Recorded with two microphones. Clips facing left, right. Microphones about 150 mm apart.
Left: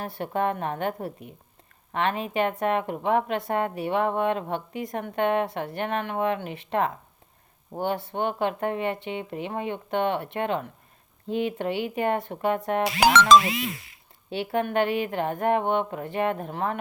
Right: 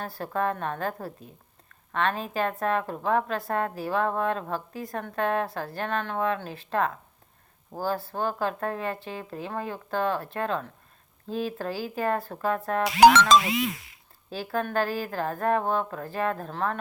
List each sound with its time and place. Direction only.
0.0 s a woman's voice: 25° left (ahead or behind)
13.4 s a sound: 70° left (ahead or behind)
14.3 s a woman's voice: 25° left (ahead or behind)